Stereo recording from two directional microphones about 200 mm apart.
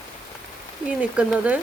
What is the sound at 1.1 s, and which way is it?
Speech, 5° right (ahead or behind).